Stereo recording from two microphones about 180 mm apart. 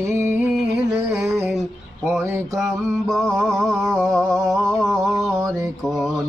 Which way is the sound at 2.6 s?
Centre (ahead or behind).